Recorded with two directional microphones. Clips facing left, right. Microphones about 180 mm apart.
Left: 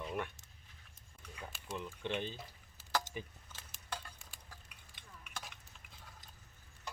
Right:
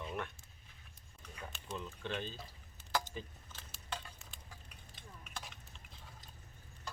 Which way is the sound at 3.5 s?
Centre (ahead or behind).